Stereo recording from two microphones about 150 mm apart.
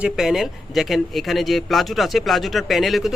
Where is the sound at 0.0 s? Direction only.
5° right (ahead or behind).